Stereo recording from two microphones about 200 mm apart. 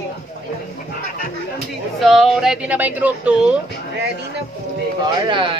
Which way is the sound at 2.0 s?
Centre (ahead or behind).